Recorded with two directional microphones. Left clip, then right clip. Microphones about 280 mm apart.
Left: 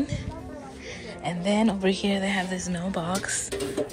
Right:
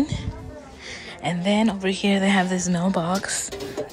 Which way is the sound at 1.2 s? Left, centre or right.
Centre.